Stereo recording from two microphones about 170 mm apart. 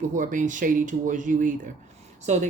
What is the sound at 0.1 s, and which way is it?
Speech, 50° right (ahead or behind).